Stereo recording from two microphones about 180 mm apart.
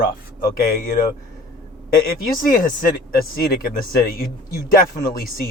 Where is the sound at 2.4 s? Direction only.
50° left (ahead or behind).